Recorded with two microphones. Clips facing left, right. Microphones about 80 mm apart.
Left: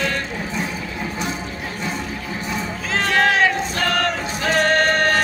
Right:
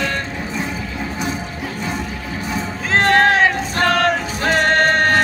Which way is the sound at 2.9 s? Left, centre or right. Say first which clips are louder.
Right 6 dB; right.